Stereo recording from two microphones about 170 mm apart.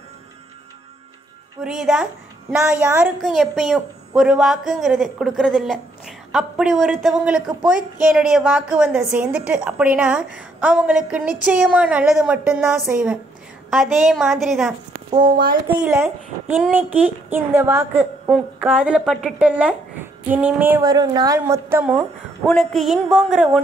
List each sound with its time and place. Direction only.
1.6 s a woman's voice: 5° right (ahead or behind)
3.2 s a woman's voice: centre (ahead or behind)
15.0 s speech: 30° right (ahead or behind)
15.7 s a woman's voice: 10° right (ahead or behind)
22.5 s a woman's voice: centre (ahead or behind)